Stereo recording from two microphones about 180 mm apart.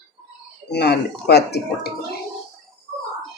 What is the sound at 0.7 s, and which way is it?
Speech, 65° left (ahead or behind).